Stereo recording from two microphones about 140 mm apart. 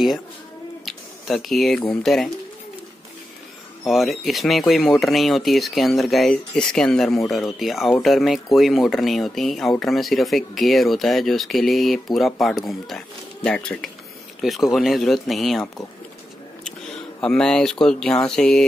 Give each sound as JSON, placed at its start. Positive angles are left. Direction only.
{"t": 0.8, "sound": "speech", "side_deg": 0}
{"t": 3.8, "sound": "speech", "side_deg": 0}
{"t": 16.6, "sound": "speech", "side_deg": 5}